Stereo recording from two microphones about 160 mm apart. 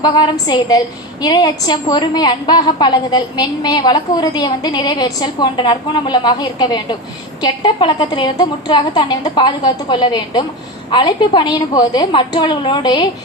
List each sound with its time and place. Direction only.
0.0 s a woman's voice: 25° left (ahead or behind)